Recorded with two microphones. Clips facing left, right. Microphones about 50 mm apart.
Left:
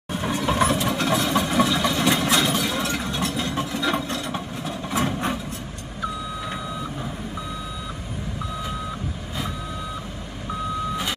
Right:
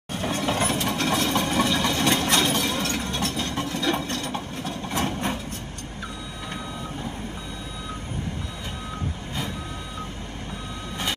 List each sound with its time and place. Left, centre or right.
0.1 s ratchet: centre
0.7 s engine: left